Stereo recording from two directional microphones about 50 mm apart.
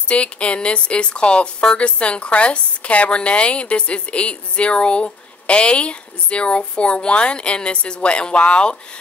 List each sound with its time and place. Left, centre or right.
0.1 s speech: left